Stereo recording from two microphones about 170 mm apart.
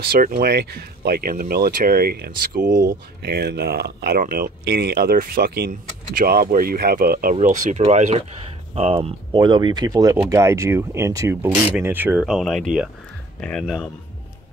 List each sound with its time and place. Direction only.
0.0 s speech: 60° right (ahead or behind)
7.3 s speech: 40° right (ahead or behind); by 13.8 s centre (ahead or behind)